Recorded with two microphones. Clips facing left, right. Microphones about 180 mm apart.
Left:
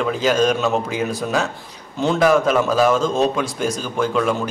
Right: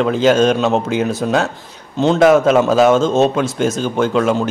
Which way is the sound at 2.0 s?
25° right (ahead or behind).